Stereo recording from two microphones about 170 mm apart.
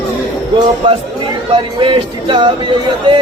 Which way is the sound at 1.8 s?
30° right (ahead or behind).